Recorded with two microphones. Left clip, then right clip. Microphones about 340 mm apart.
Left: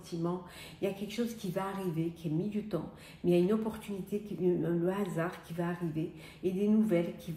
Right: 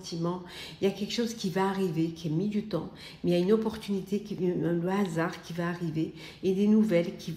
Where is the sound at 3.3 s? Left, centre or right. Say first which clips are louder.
Right 3 dB; right.